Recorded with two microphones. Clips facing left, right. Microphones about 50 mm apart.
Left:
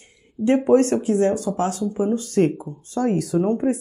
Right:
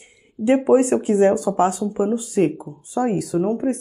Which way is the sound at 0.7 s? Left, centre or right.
Centre.